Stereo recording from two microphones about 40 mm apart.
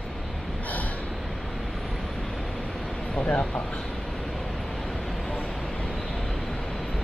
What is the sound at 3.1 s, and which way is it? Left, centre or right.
Vehicle, left.